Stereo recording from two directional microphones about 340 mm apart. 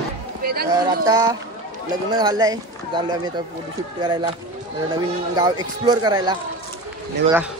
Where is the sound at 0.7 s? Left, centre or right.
Centre.